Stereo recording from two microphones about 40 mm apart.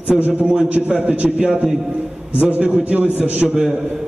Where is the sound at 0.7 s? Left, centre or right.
Right.